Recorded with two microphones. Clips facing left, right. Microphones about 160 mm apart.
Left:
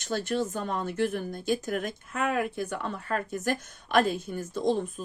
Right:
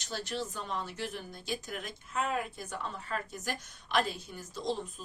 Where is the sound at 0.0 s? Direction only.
55° left (ahead or behind).